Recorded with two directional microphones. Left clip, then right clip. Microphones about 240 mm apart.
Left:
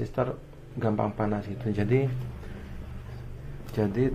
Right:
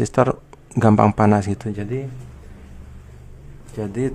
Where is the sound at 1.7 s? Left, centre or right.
Centre.